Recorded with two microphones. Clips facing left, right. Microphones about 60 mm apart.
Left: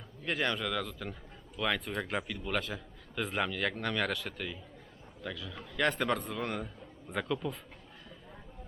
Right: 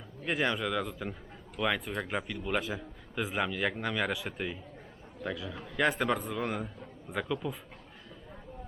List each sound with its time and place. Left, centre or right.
0.3 s a man's voice: centre
4.4 s a man's voice: right
5.7 s a man's voice: centre